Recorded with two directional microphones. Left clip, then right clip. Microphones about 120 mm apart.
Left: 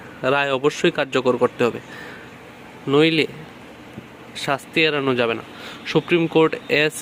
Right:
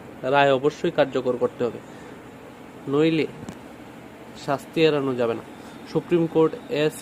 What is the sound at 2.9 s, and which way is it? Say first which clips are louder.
Speech: left 4 dB; 15° left (ahead or behind).